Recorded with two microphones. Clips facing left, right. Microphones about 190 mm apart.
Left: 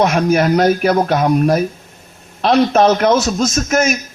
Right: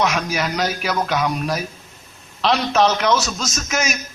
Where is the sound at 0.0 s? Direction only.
55° left (ahead or behind).